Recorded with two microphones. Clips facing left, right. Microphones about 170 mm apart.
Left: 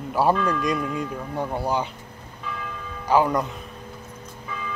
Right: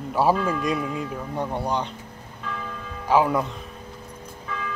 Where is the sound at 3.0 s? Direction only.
Centre (ahead or behind).